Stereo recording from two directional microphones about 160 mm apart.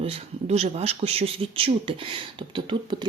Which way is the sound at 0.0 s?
40° right (ahead or behind).